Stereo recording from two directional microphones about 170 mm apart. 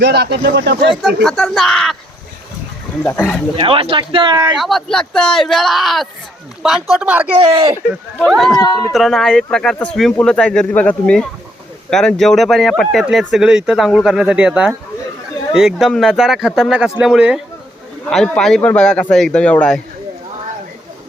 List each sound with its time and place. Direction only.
0.0 s speech: 80° right
1.0 s speech: centre (ahead or behind)
3.0 s speech: 10° left (ahead or behind)
3.5 s speech: 35° right (ahead or behind)
4.5 s speech: centre (ahead or behind)
7.3 s speech: 35° right (ahead or behind)
8.2 s speech: centre (ahead or behind)
8.5 s speech: 20° left (ahead or behind)
8.9 s speech: centre (ahead or behind)